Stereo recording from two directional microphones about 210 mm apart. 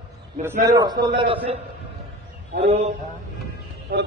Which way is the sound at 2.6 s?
30° right (ahead or behind).